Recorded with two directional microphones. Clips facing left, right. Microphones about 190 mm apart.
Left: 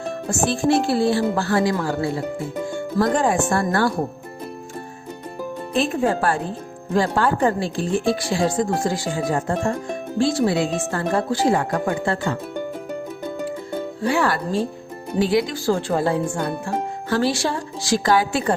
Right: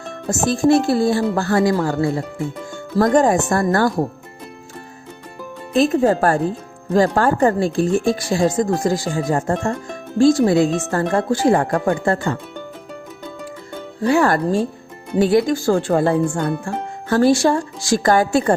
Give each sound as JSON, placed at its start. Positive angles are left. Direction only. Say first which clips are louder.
{"t": 0.3, "sound": "speech", "louder": "right 4 dB", "side_deg": -40}
{"t": 5.7, "sound": "speech", "louder": "right 6 dB", "side_deg": -40}
{"t": 14.0, "sound": "speech", "louder": "right 6 dB", "side_deg": -40}